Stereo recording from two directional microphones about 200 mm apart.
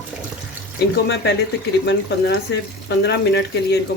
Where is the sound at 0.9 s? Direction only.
60° left (ahead or behind).